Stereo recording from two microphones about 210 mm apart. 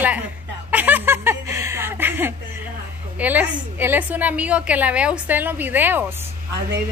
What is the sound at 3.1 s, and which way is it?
A woman's voice, 10° right (ahead or behind).